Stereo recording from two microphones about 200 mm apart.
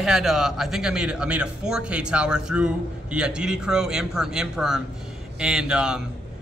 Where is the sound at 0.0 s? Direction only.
Centre (ahead or behind).